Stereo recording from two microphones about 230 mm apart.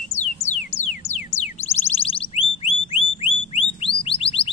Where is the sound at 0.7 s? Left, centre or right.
Left.